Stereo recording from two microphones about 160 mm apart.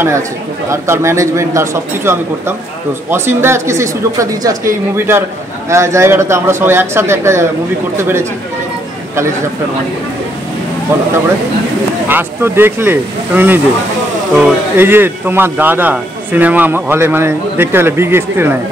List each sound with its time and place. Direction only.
0.7 s speech: 15° right (ahead or behind)
12.1 s speech: 15° right (ahead or behind)